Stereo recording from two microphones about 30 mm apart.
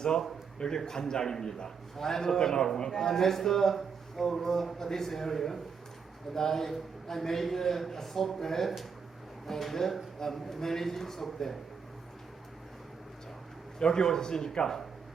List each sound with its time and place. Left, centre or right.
0.9 s a man's voice: left
13.7 s a man's voice: left